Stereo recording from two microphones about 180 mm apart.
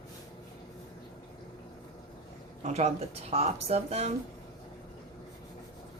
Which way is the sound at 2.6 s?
40° right (ahead or behind).